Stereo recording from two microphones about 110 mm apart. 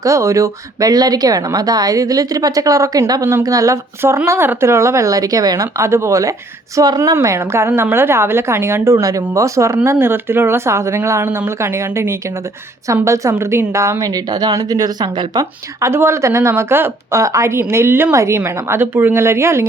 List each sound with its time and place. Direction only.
0.0 s a woman's voice: 30° right (ahead or behind)
15.8 s a woman's voice: 25° right (ahead or behind)